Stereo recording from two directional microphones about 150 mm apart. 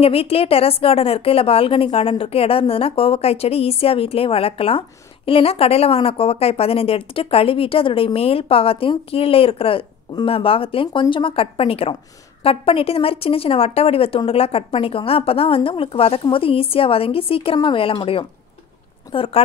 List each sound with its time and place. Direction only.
0.0 s a woman's voice: 40° left (ahead or behind)